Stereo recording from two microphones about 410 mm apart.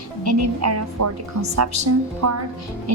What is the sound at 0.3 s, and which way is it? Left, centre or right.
A woman's voice, right.